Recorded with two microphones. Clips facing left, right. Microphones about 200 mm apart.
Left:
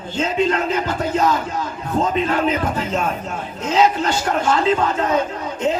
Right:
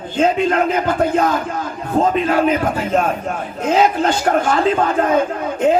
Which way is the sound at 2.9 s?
50° right (ahead or behind).